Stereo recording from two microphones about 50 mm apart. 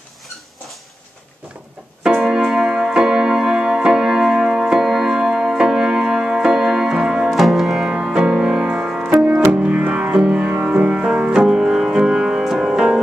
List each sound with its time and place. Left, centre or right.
2.1 s keyboard: centre
7.2 s music: centre
7.9 s music: centre
9.5 s music: right; by 13.0 s centre